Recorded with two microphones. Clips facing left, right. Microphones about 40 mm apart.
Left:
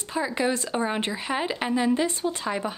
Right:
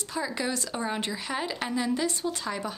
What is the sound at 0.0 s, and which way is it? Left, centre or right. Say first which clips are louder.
Speech: left 5 dB; left.